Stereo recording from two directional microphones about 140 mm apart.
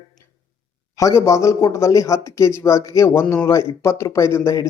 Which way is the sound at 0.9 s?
20° left (ahead or behind).